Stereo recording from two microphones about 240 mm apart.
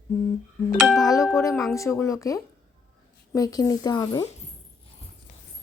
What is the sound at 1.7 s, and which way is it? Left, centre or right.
Speech, centre.